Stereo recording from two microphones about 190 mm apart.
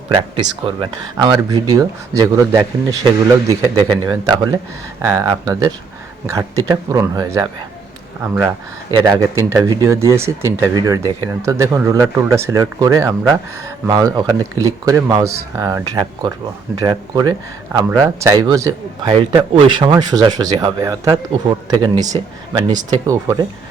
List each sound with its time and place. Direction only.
0.1 s speech: 25° right (ahead or behind)
8.4 s speech: 20° right (ahead or behind)